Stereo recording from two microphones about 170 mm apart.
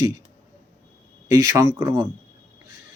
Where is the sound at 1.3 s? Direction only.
20° right (ahead or behind).